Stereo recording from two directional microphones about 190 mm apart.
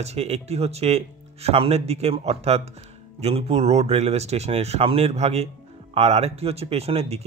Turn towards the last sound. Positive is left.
turn(degrees=-30)  # may be behind; listen again after turning